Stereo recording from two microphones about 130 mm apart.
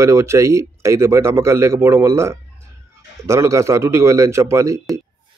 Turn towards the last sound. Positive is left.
turn(degrees=-25)  # may be behind; listen again after turning